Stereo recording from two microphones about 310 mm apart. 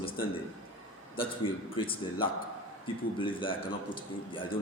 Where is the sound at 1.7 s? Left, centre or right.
Centre.